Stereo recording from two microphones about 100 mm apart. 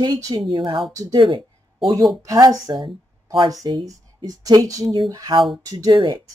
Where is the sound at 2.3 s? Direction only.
35° right (ahead or behind).